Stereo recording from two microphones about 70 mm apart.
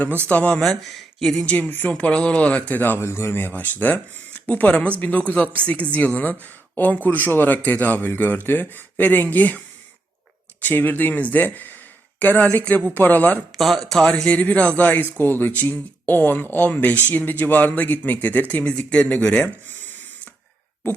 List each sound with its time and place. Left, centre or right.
0.3 s speech: left
0.6 s speech: centre
1.5 s speech: left
2.0 s speech: centre
10.6 s speech: left
13.6 s speech: centre
14.3 s speech: left
18.9 s a sound: centre